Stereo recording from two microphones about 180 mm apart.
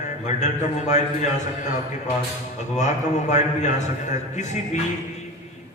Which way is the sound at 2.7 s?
40° left (ahead or behind).